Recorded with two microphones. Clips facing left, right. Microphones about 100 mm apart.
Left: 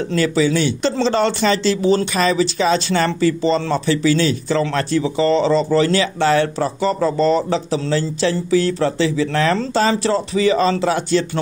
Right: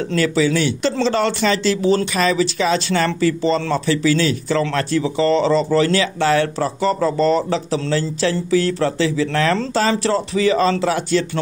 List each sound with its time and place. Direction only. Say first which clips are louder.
0.1 s speech: even; 25° left (ahead or behind)